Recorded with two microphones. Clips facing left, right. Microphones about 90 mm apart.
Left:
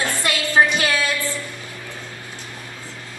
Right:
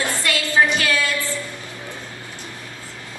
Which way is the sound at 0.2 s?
25° left (ahead or behind).